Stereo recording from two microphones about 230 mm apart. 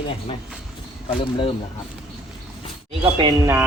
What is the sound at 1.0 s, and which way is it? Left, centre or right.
Speech, left.